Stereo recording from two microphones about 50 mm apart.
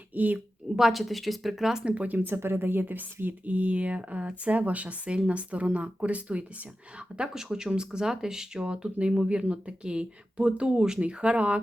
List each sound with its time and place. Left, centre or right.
0.1 s a woman's voice: right
0.8 s speech: centre
2.0 s speech: right
7.2 s speech: centre